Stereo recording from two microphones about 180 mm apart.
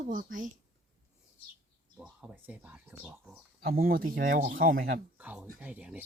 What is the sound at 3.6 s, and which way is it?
Speech, 55° right (ahead or behind).